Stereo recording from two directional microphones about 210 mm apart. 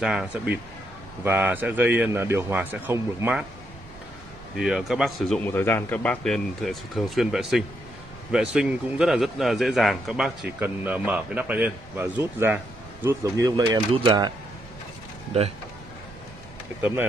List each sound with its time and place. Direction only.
0.0 s a man's voice: 5° right (ahead or behind)
4.6 s a man's voice: centre (ahead or behind)
5.4 s a man's voice: 10° left (ahead or behind); by 14.3 s 20° right (ahead or behind)